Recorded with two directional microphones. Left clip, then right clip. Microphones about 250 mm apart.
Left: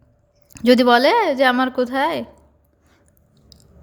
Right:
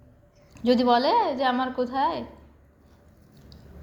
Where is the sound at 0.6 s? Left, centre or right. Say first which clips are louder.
Left 7 dB; left.